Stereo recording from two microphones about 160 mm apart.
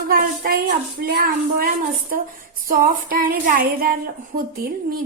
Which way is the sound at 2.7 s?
65° right (ahead or behind).